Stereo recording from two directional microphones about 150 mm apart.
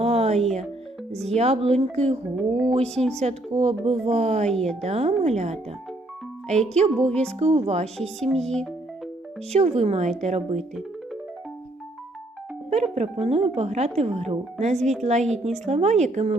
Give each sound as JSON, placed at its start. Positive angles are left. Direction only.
{"t": 0.0, "sound": "music", "side_deg": -45}
{"t": 1.4, "sound": "speech", "side_deg": -45}
{"t": 2.3, "sound": "music", "side_deg": -10}
{"t": 2.6, "sound": "speech", "side_deg": -40}
{"t": 4.4, "sound": "a woman's voice", "side_deg": 5}
{"t": 4.8, "sound": "speech", "side_deg": -45}
{"t": 6.7, "sound": "speech", "side_deg": -45}
{"t": 7.1, "sound": "a woman's voice", "side_deg": 5}
{"t": 7.3, "sound": "speech", "side_deg": -45}
{"t": 8.3, "sound": "a woman's voice", "side_deg": 5}
{"t": 9.5, "sound": "speech", "side_deg": -45}
{"t": 12.7, "sound": "speech", "side_deg": -45}